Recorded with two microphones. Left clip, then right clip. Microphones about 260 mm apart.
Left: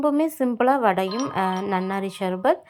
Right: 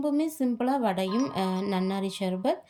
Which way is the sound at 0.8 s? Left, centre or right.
Centre.